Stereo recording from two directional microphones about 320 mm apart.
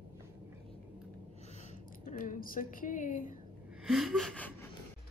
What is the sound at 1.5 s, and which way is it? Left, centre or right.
A woman's voice, left.